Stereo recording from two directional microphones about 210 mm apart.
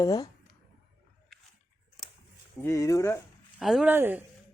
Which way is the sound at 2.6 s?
15° left (ahead or behind).